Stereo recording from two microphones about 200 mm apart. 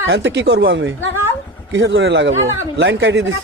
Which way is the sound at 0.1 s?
60° right (ahead or behind).